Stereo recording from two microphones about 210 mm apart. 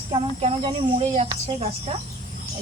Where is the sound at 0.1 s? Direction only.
25° right (ahead or behind).